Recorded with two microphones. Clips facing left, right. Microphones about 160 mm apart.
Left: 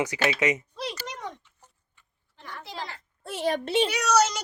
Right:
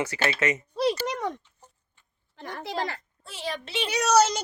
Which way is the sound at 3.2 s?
55° left (ahead or behind).